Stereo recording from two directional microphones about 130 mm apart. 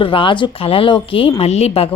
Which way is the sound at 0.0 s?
40° left (ahead or behind).